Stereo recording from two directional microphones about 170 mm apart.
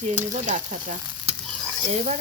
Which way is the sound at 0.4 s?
50° right (ahead or behind).